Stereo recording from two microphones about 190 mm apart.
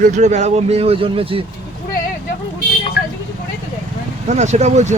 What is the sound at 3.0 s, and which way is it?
Vehicle, 60° left (ahead or behind).